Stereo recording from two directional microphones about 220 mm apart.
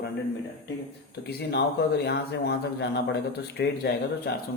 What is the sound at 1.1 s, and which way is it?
Speech, 50° left (ahead or behind).